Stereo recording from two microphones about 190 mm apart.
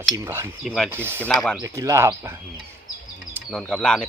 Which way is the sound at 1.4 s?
Centre (ahead or behind).